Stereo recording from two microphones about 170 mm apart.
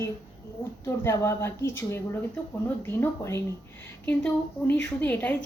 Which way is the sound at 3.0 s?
15° left (ahead or behind).